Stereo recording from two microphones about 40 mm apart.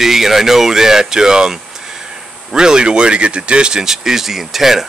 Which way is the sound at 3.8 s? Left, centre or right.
Centre.